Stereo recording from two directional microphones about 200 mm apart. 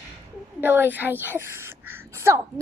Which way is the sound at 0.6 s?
10° right (ahead or behind).